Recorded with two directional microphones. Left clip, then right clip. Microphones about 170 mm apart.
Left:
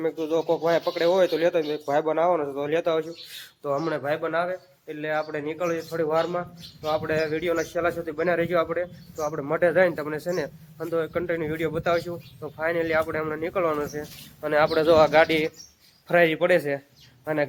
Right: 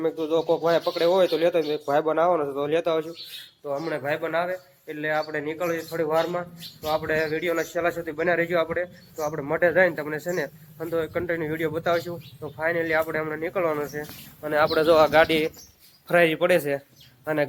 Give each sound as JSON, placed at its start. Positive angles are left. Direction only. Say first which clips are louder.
{"t": 0.0, "sound": "a man's voice", "louder": "right 1 dB", "side_deg": 0}
{"t": 3.8, "sound": "speech", "louder": "left 1 dB", "side_deg": 25}
{"t": 4.0, "sound": "a man's voice", "louder": "even", "side_deg": 5}